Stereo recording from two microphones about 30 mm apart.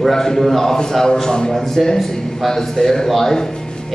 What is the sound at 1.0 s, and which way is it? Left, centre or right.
Speech, left.